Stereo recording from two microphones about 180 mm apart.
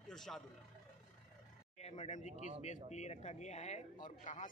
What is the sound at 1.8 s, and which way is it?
Speech, 40° left (ahead or behind).